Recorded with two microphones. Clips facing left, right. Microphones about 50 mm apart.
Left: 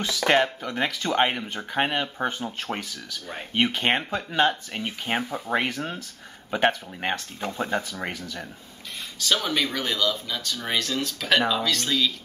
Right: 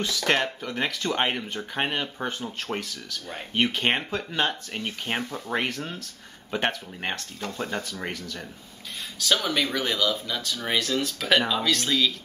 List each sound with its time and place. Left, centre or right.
0.2 s speech: centre
0.7 s speech: centre